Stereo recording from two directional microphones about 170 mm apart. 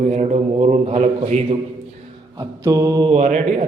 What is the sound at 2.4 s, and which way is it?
Mantra, 20° right (ahead or behind).